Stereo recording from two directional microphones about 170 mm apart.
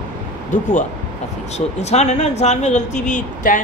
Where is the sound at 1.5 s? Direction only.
40° left (ahead or behind).